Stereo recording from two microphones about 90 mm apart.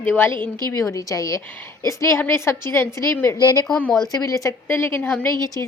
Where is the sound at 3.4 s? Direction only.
45° left (ahead or behind).